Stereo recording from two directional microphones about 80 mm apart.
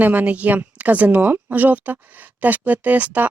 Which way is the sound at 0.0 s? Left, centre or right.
Centre.